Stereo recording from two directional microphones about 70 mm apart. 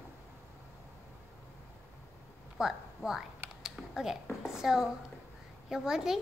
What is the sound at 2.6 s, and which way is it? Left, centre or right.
Speech, centre.